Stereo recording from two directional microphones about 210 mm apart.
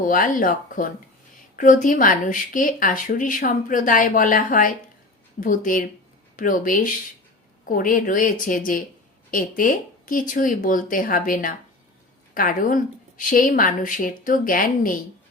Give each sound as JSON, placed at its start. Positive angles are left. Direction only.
{"t": 0.0, "sound": "speech", "side_deg": 40}